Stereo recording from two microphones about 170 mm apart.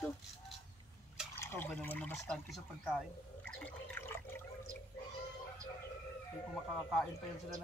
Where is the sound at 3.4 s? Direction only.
10° left (ahead or behind).